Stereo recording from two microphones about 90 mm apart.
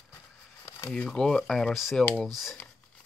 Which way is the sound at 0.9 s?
5° left (ahead or behind).